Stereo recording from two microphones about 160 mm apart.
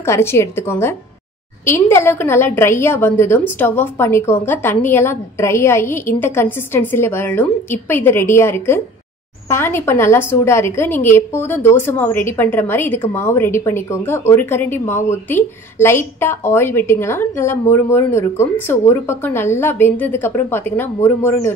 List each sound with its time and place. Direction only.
0.0 s a woman's voice: 15° left (ahead or behind)